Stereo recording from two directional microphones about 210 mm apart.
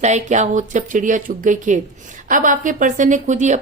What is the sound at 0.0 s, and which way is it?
A woman's voice, 35° right (ahead or behind).